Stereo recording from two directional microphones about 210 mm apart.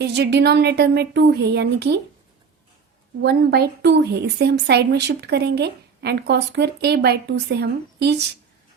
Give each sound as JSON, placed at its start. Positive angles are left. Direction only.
{"t": 0.0, "sound": "a woman's voice", "side_deg": -50}
{"t": 3.2, "sound": "a woman's voice", "side_deg": -50}